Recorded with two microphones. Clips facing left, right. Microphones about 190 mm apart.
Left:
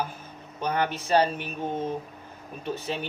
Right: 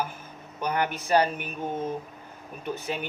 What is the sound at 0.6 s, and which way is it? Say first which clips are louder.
Speech: left 1 dB; 10° right (ahead or behind).